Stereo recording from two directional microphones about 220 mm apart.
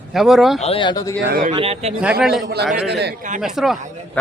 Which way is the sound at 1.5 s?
25° right (ahead or behind).